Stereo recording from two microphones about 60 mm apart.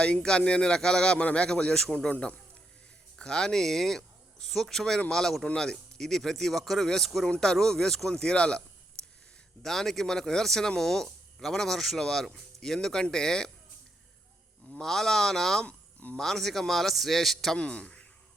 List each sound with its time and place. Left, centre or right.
0.0 s speech: centre
9.6 s speech: centre
14.7 s speech: centre
15.6 s a sound: left
16.1 s speech: centre
17.6 s speech: centre